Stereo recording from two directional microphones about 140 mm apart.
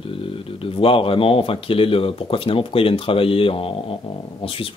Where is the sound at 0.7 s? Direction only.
40° left (ahead or behind).